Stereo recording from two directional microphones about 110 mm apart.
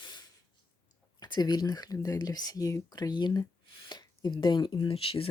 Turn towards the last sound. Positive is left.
turn(degrees=55)  # may be behind; listen again after turning